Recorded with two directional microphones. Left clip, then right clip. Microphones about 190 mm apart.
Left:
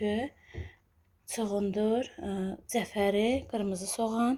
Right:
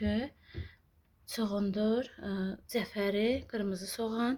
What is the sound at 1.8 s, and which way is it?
A woman's voice, 10° left (ahead or behind).